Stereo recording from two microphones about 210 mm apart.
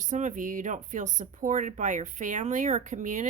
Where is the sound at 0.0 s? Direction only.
35° right (ahead or behind).